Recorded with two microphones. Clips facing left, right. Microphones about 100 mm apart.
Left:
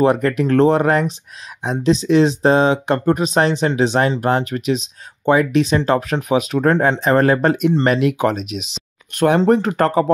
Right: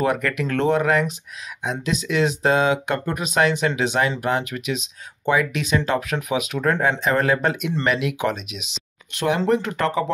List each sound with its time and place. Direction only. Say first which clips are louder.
0.0 s speech: left 7 dB; 30° left (ahead or behind)